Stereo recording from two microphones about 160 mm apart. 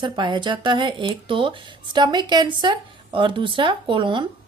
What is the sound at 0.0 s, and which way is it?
A woman's voice, 30° right (ahead or behind).